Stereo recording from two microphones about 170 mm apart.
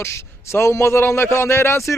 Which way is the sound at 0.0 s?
15° left (ahead or behind).